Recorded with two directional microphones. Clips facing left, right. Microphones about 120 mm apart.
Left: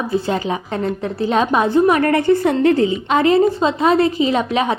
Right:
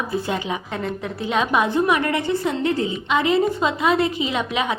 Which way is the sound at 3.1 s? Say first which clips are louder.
Left 4 dB; 40° left (ahead or behind).